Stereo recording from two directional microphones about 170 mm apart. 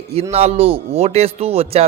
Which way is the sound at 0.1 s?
35° right (ahead or behind).